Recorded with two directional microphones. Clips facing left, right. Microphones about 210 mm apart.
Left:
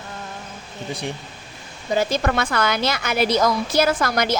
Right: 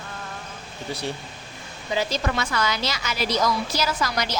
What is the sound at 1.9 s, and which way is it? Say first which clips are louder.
A woman's voice: left 5 dB; 50° left (ahead or behind).